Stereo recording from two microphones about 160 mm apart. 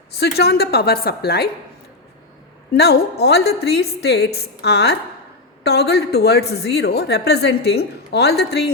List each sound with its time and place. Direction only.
0.2 s a woman's voice: 85° left
2.7 s a woman's voice: 90° left